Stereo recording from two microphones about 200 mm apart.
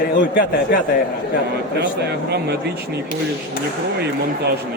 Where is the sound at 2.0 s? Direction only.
55° right (ahead or behind).